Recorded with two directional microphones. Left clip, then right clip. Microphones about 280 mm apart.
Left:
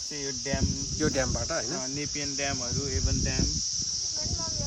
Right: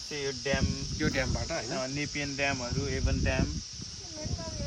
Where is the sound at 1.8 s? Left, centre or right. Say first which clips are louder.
Left 1 dB; right.